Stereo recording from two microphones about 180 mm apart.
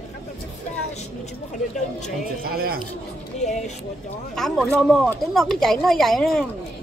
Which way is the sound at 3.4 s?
40° left (ahead or behind).